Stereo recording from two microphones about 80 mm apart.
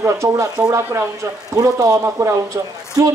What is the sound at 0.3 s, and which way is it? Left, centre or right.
Speech, right.